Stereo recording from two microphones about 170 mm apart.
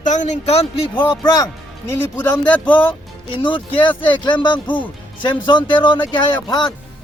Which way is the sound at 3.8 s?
30° left (ahead or behind).